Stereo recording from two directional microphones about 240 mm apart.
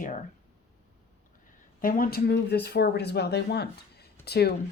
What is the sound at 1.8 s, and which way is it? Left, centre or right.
Speech, left.